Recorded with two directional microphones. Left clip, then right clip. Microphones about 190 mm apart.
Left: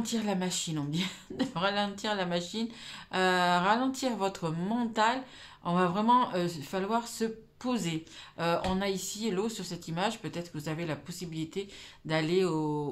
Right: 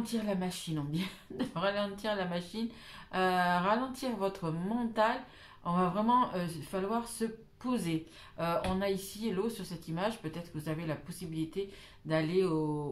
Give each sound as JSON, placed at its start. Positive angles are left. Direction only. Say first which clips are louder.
{"t": 0.0, "sound": "speech", "louder": "left 3 dB", "side_deg": 40}